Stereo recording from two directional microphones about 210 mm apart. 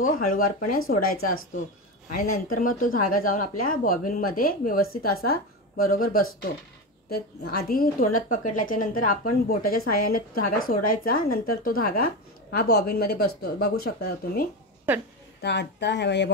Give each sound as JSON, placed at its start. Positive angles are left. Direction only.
{"t": 0.0, "sound": "speech", "side_deg": 40}
{"t": 15.4, "sound": "speech", "side_deg": 55}